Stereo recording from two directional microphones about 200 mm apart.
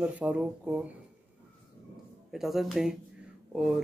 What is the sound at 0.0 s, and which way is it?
Speech, 5° right (ahead or behind).